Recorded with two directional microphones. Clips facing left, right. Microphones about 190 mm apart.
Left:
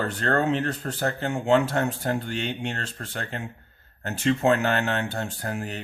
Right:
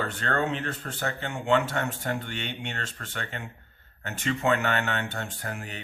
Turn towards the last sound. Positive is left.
turn(degrees=35)  # may be behind; listen again after turning